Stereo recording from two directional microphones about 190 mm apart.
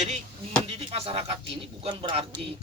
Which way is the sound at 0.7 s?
35° right (ahead or behind).